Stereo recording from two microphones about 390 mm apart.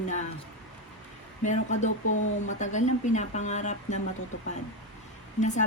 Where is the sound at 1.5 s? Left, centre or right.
Centre.